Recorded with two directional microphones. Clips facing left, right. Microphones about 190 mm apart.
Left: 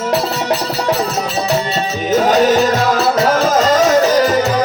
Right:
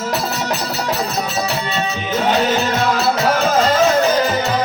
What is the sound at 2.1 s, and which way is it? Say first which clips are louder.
Music: left 6 dB; 40° left (ahead or behind).